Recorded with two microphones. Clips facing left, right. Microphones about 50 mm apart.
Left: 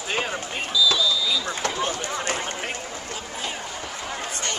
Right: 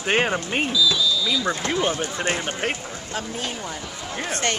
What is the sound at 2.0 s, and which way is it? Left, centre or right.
Speech, right.